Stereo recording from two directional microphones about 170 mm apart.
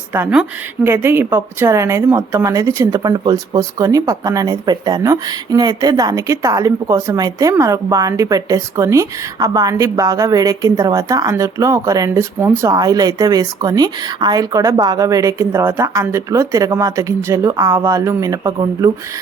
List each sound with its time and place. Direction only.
0.1 s a woman's voice: 10° right (ahead or behind)